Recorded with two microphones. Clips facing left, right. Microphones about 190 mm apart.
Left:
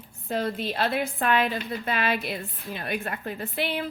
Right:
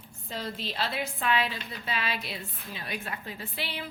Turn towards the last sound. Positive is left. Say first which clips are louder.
# left 8 dB
turn(degrees=55)  # may be behind; listen again after turning